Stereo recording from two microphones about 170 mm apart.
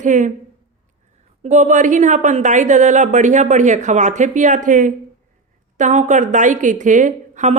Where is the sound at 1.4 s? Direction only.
40° right (ahead or behind).